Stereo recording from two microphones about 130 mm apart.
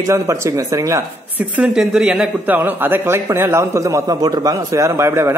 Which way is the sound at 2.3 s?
15° right (ahead or behind).